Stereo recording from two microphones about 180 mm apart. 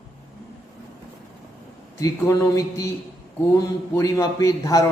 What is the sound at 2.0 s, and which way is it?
Speech, 20° left (ahead or behind).